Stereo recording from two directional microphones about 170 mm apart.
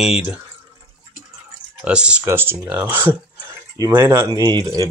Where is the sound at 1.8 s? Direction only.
5° right (ahead or behind).